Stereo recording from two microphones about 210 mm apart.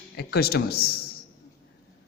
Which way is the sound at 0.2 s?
50° left (ahead or behind).